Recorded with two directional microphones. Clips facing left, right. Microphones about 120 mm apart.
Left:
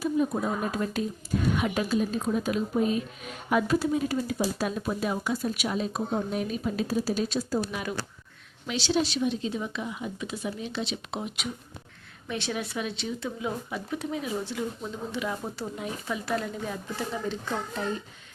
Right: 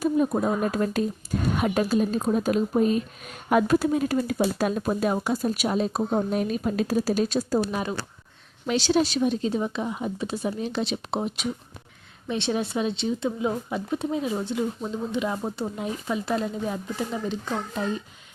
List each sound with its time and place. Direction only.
0.0 s speech: 50° right (ahead or behind)
8.6 s speech: 45° right (ahead or behind); by 17.8 s 15° right (ahead or behind)